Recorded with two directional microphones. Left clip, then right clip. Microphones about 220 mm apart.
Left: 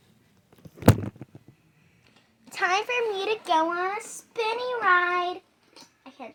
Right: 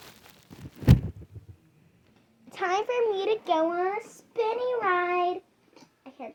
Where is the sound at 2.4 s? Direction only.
25° left (ahead or behind).